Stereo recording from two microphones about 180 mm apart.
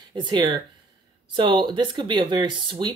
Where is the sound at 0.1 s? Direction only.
25° right (ahead or behind).